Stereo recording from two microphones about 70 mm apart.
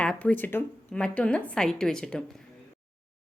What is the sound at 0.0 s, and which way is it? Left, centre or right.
Speech, centre.